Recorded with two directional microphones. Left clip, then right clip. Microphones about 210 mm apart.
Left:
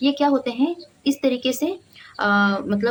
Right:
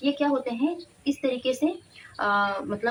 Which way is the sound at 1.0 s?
50° left (ahead or behind).